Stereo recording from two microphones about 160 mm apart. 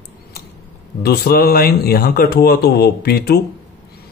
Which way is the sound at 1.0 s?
85° left.